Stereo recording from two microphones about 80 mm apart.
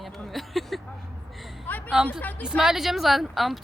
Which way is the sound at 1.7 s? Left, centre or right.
Left.